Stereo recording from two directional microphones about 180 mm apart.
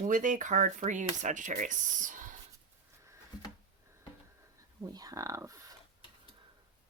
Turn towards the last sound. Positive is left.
turn(degrees=-20)  # may be behind; listen again after turning